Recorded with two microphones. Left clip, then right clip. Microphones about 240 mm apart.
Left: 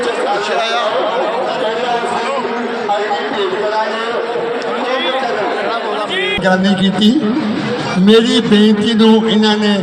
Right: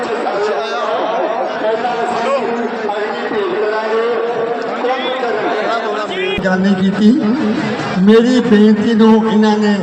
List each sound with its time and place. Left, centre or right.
6.5 s a man's voice: left